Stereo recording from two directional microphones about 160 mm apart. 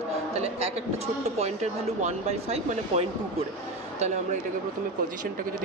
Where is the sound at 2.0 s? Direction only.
40° right (ahead or behind).